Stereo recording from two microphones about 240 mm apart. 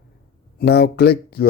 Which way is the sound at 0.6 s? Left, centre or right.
Left.